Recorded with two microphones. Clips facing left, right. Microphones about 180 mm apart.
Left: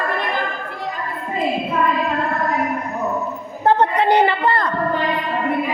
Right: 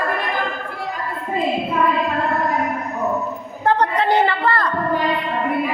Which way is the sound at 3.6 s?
20° left (ahead or behind).